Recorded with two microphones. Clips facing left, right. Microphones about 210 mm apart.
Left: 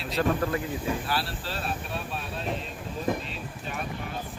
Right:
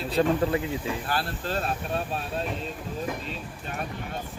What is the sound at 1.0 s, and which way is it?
Speech, 45° right (ahead or behind).